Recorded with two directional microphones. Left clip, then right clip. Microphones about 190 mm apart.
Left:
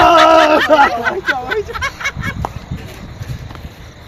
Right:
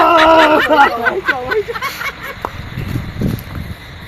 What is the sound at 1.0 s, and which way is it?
Speech, 45° left (ahead or behind).